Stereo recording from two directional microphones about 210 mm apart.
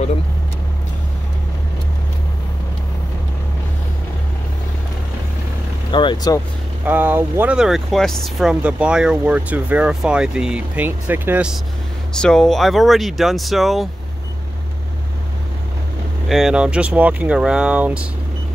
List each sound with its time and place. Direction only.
5.9 s speech: 20° left (ahead or behind)
6.9 s speech: 10° right (ahead or behind)
16.3 s speech: centre (ahead or behind)